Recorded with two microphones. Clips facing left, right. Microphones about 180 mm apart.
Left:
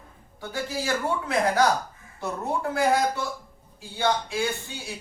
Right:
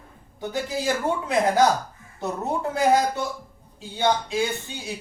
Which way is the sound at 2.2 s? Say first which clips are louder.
Right 2 dB; 20° right (ahead or behind).